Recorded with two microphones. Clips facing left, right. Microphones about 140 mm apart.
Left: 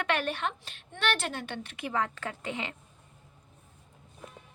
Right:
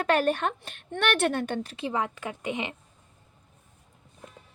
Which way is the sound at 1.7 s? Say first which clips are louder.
Right 4 dB; 30° right (ahead or behind).